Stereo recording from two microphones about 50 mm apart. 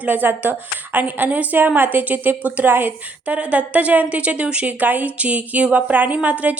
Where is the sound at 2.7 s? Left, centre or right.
Right.